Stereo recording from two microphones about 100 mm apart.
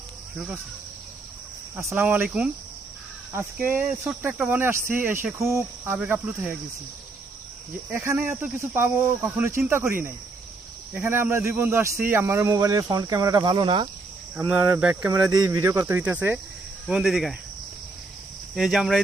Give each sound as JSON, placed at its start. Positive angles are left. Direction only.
{"t": 2.0, "sound": "speech", "side_deg": -15}
{"t": 5.4, "sound": "speech", "side_deg": -25}
{"t": 8.0, "sound": "speech", "side_deg": -20}
{"t": 14.3, "sound": "speech", "side_deg": -20}
{"t": 15.1, "sound": "speech", "side_deg": -40}
{"t": 16.0, "sound": "speech", "side_deg": -15}
{"t": 16.9, "sound": "speech", "side_deg": 0}
{"t": 18.5, "sound": "speech", "side_deg": -5}